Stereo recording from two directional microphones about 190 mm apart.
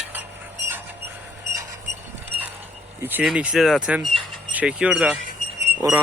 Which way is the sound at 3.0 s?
10° right (ahead or behind).